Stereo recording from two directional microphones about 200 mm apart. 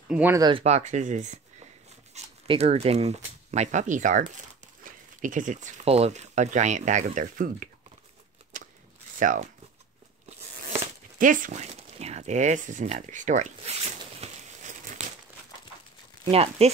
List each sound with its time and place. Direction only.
0.1 s speech: 10° right (ahead or behind)
0.4 s speech: 25° right (ahead or behind); by 7.7 s 45° right (ahead or behind)
9.2 s speech: 40° right (ahead or behind)
11.1 s speech: 40° right (ahead or behind)
16.3 s speech: 30° right (ahead or behind)